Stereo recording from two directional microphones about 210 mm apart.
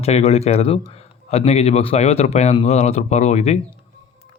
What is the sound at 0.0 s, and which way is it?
A man's voice, 30° left (ahead or behind).